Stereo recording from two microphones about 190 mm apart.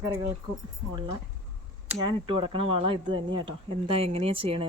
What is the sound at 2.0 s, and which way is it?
Speech, 25° right (ahead or behind).